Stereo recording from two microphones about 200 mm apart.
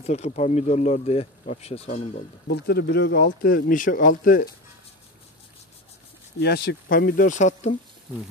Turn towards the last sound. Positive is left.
turn(degrees=35)  # may be behind; listen again after turning